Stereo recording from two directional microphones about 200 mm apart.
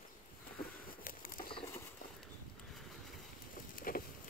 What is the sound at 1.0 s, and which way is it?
Bird, 45° left (ahead or behind).